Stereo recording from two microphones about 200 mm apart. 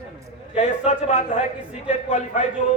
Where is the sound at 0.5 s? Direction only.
35° left (ahead or behind).